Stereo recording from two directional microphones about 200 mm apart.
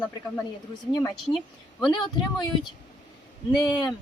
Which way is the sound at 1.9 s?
20° left (ahead or behind).